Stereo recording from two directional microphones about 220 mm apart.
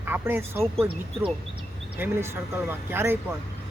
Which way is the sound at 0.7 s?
25° right (ahead or behind).